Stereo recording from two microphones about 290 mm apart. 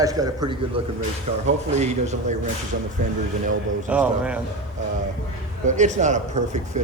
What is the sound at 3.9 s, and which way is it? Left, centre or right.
Speech, centre.